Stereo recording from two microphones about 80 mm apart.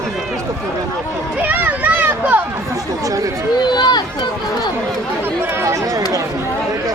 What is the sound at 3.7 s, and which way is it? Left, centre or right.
Speech, left.